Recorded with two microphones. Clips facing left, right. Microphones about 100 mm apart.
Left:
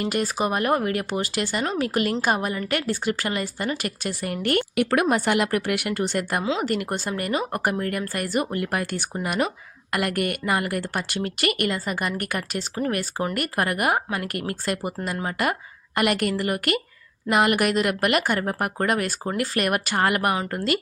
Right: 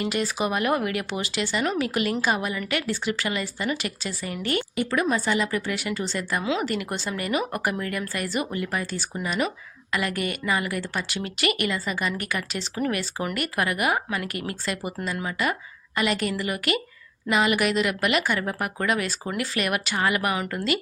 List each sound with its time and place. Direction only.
0.0 s speech: 45° left (ahead or behind)
1.6 s a woman's voice: 35° left (ahead or behind); by 6.4 s 60° left (ahead or behind)
6.7 s a woman's voice: 50° left (ahead or behind)